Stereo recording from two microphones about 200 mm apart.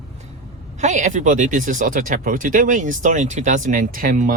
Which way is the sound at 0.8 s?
35° right (ahead or behind).